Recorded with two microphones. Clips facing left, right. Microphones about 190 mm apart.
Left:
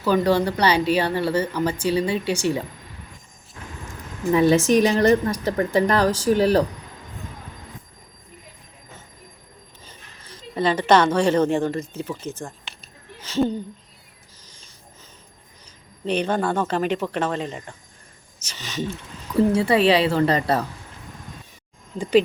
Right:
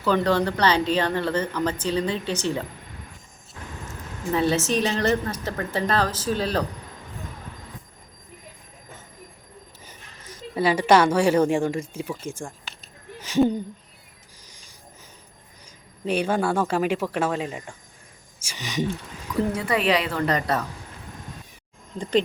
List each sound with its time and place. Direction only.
0.0 s speech: 10° left (ahead or behind)
4.4 s speech: 10° left (ahead or behind)
10.5 s a woman's voice: 10° right (ahead or behind)
14.4 s a sound: 15° right (ahead or behind)
16.0 s a woman's voice: 5° right (ahead or behind)
19.3 s a woman's voice: 30° left (ahead or behind)
21.9 s speech: 5° left (ahead or behind)